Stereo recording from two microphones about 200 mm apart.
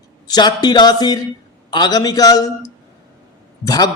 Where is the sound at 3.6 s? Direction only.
20° left (ahead or behind).